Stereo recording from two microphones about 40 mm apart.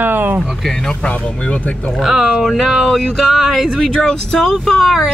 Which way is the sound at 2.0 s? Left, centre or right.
Centre.